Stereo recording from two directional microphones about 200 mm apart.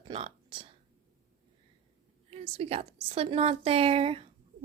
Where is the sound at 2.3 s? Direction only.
30° right (ahead or behind).